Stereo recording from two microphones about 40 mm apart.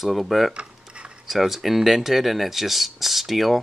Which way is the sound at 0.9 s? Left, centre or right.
Right.